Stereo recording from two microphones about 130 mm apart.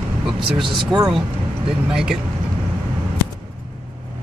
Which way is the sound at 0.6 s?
30° right (ahead or behind).